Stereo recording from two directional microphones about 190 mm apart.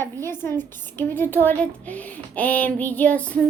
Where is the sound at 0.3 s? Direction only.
10° left (ahead or behind).